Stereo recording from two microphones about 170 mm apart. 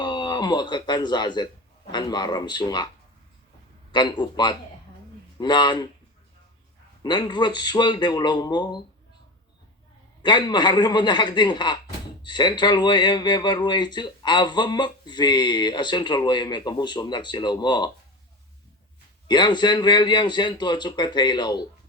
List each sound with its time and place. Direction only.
0.0 s speech: 25° left (ahead or behind)
3.9 s speech: 25° left (ahead or behind)
7.0 s speech: 25° left (ahead or behind)
10.2 s speech: 25° left (ahead or behind)
19.3 s speech: 25° left (ahead or behind)